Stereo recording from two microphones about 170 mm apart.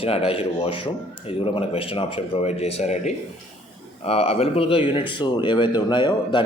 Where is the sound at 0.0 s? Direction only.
35° left (ahead or behind).